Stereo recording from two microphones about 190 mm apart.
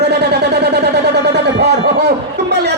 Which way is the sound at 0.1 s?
60° right (ahead or behind).